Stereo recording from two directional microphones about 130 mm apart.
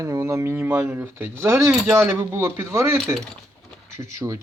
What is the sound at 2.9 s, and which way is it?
Speech, centre (ahead or behind).